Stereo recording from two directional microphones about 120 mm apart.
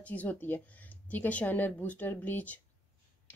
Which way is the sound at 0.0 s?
15° left (ahead or behind).